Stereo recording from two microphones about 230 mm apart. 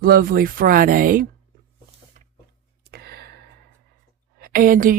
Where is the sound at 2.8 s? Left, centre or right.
Right.